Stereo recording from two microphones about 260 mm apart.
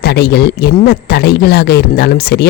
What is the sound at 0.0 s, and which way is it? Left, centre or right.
Speech, left.